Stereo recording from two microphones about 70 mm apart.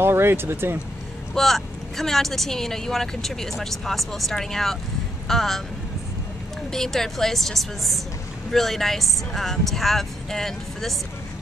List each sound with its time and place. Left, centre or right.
0.0 s speech: right
1.3 s speech: centre
6.7 s speech: centre